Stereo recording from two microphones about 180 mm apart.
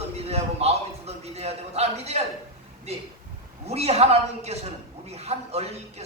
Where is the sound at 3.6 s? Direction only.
35° right (ahead or behind).